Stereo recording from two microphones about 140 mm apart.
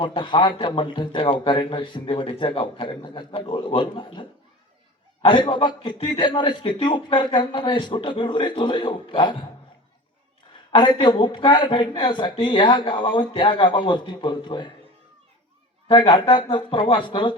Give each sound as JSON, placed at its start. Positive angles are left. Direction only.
{"t": 0.0, "sound": "a man's voice", "side_deg": 35}
{"t": 10.7, "sound": "a man's voice", "side_deg": 35}
{"t": 15.9, "sound": "a man's voice", "side_deg": 35}